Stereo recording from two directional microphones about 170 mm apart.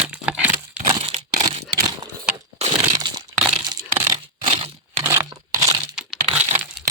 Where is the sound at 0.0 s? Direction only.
5° right (ahead or behind).